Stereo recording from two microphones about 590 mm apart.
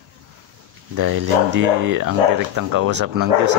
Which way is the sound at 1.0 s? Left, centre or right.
Right.